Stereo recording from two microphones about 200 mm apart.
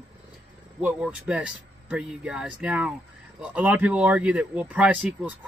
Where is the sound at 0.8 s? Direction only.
5° right (ahead or behind).